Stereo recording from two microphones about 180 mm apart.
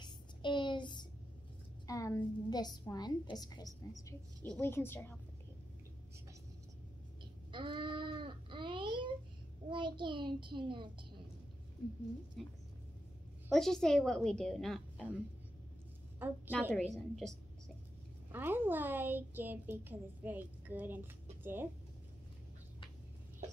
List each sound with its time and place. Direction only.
0.0 s child singing: 25° left (ahead or behind)
1.9 s a woman's voice: 20° left (ahead or behind)
7.5 s a sound: 25° right (ahead or behind)
9.7 s a child's voice: 25° right (ahead or behind)
12.4 s a woman's voice: centre (ahead or behind)
16.2 s a woman's voice: 10° right (ahead or behind)
16.7 s a woman's voice: centre (ahead or behind)
18.3 s a woman's voice: 10° right (ahead or behind)